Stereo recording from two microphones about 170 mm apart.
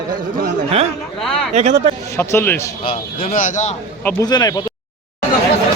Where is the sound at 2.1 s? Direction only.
15° left (ahead or behind).